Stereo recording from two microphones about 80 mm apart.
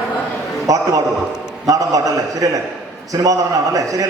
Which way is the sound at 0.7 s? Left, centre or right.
Right.